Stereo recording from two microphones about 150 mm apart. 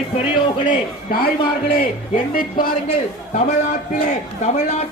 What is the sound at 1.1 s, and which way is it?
Speech, 75° left (ahead or behind).